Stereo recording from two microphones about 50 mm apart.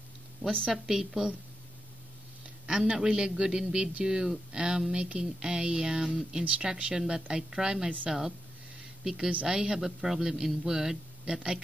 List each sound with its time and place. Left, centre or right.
0.7 s a man's voice: centre
2.6 s a man's voice: centre
9.0 s speech: centre
9.3 s speech: right
9.6 s a man's voice: centre